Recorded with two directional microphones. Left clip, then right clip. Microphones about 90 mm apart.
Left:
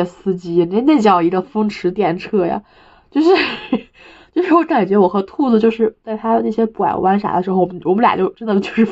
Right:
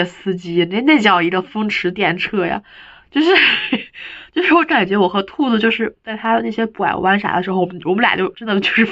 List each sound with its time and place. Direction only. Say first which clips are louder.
0.7 s speech: even; 40° left (ahead or behind)